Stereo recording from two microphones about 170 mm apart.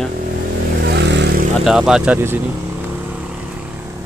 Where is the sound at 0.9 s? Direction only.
85° right.